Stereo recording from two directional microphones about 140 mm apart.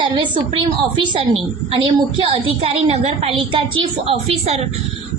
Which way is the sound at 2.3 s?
45° right (ahead or behind).